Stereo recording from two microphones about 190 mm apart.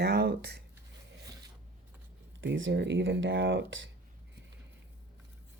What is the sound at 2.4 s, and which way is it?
Speech, 75° right (ahead or behind).